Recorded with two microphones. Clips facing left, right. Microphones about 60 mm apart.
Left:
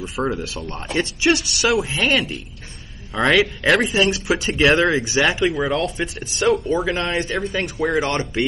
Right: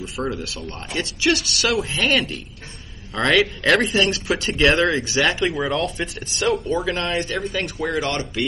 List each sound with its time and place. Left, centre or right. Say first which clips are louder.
0.1 s speech: left 4 dB; centre
0.9 s speech: left 2 dB; left
3.3 s speech: left 1 dB; centre
7.9 s speech: left 2 dB; left